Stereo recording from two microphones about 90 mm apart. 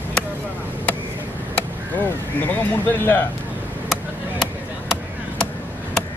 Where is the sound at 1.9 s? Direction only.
20° left (ahead or behind).